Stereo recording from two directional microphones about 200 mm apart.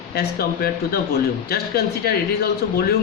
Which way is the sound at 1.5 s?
50° left (ahead or behind).